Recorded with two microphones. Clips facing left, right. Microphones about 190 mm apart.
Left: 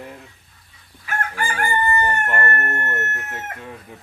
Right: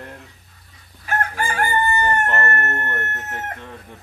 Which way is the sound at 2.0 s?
10° left (ahead or behind).